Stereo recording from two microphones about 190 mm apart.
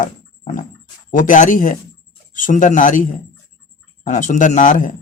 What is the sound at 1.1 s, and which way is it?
Speech, 45° left (ahead or behind).